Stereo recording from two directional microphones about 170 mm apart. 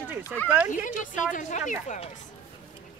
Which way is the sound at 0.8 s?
50° left (ahead or behind).